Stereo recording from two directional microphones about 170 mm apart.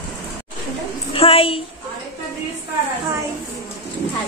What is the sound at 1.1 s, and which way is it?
Speech, 35° left (ahead or behind).